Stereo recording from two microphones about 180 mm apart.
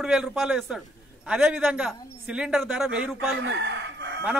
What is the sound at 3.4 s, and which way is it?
Crowing, 70° right (ahead or behind).